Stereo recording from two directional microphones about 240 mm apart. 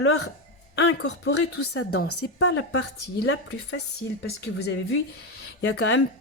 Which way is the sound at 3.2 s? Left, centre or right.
Left.